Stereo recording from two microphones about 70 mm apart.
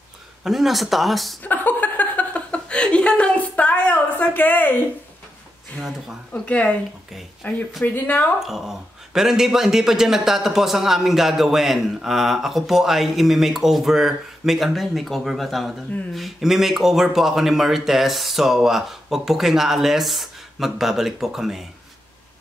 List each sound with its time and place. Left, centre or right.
0.4 s speech: centre
1.4 s speech: left
5.8 s speech: centre
6.3 s speech: centre
8.4 s speech: centre